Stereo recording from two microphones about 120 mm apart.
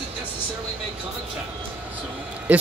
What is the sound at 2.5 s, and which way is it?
Speech, 10° right (ahead or behind).